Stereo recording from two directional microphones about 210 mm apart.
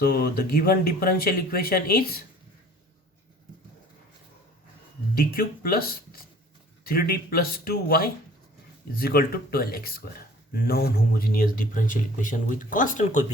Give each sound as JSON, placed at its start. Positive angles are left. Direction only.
{"t": 0.0, "sound": "speech", "side_deg": 50}
{"t": 5.1, "sound": "speech", "side_deg": 45}